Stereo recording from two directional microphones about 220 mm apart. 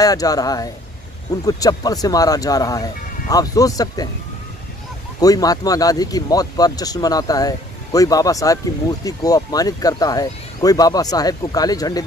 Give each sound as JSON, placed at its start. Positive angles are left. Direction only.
{"t": 0.0, "sound": "speech", "side_deg": 15}
{"t": 5.2, "sound": "speech", "side_deg": 15}